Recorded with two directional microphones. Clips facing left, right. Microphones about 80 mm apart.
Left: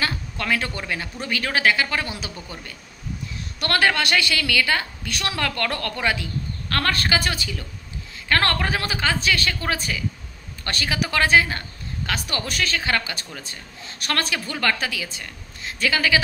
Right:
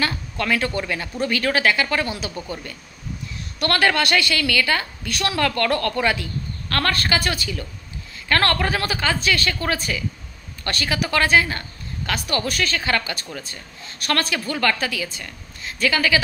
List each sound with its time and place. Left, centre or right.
0.0 s a woman's voice: centre
3.5 s a woman's voice: left